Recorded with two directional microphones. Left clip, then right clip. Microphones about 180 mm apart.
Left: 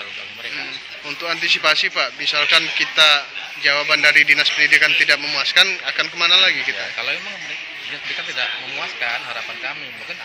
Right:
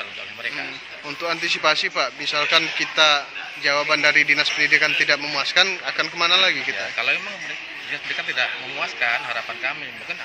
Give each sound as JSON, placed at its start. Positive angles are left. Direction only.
{"t": 1.2, "sound": "a man's voice", "side_deg": -15}
{"t": 7.0, "sound": "a man's voice", "side_deg": 0}
{"t": 8.4, "sound": "a man's voice", "side_deg": -5}